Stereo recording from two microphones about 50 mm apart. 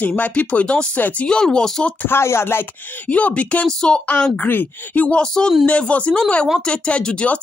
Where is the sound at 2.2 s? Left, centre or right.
Left.